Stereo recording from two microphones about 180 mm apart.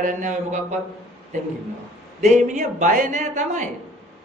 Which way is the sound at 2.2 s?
45° right (ahead or behind).